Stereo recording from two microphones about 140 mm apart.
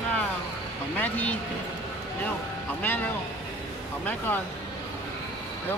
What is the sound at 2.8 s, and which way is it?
Speech, 15° left (ahead or behind).